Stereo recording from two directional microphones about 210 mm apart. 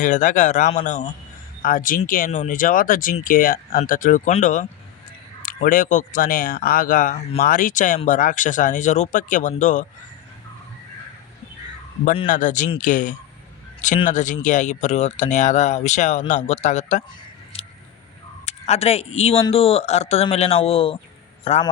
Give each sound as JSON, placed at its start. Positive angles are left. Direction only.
{"t": 0.0, "sound": "speech", "side_deg": 35}
{"t": 12.3, "sound": "speech", "side_deg": 35}
{"t": 18.4, "sound": "a man's voice", "side_deg": 30}